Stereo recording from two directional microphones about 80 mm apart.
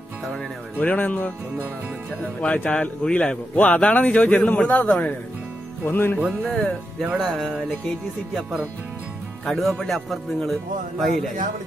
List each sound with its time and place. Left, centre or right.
0.3 s a man's voice: centre
2.4 s a man's voice: centre
5.9 s music: left
6.4 s a man's voice: centre
7.0 s a man's voice: centre